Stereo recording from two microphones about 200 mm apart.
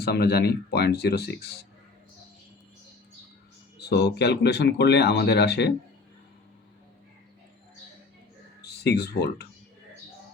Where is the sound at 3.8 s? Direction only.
55° left (ahead or behind).